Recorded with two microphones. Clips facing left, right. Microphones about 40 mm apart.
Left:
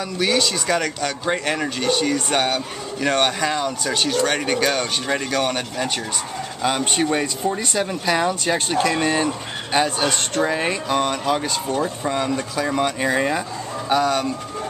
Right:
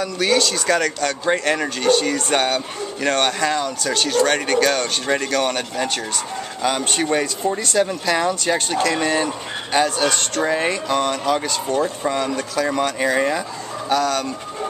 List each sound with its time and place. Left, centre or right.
0.0 s speech: centre
10.4 s speech: centre